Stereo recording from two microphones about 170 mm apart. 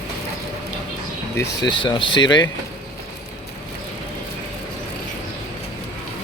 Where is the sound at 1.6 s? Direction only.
30° left (ahead or behind).